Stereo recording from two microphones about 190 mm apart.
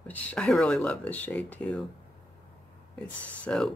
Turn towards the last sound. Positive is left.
turn(degrees=5)  # may be behind; listen again after turning